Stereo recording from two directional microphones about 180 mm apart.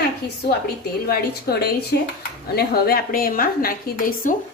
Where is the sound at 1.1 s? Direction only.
60° left (ahead or behind).